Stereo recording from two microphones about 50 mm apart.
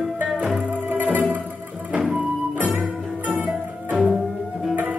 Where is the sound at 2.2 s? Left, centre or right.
Centre.